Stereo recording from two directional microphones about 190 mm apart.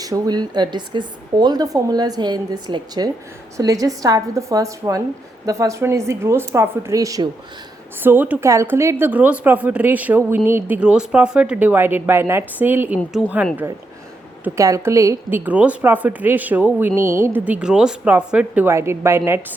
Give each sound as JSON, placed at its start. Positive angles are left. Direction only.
{"t": 0.0, "sound": "speech", "side_deg": -20}
{"t": 13.0, "sound": "a woman's voice", "side_deg": 5}
{"t": 14.4, "sound": "speech", "side_deg": -15}